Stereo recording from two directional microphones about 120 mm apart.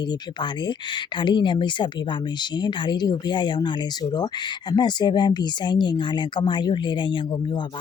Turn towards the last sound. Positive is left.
turn(degrees=40)  # may be behind; listen again after turning